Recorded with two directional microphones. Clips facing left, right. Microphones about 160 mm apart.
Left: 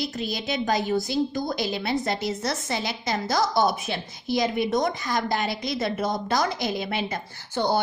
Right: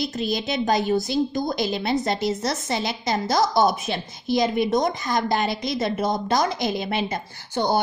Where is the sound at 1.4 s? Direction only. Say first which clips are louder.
Right 3 dB; 40° right (ahead or behind).